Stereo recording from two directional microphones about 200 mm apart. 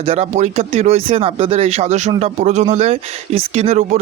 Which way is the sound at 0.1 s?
35° right (ahead or behind).